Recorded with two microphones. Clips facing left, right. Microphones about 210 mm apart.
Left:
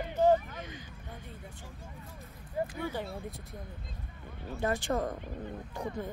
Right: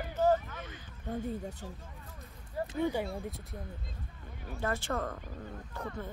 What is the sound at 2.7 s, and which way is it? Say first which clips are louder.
Speech: right 5 dB; 20° right (ahead or behind).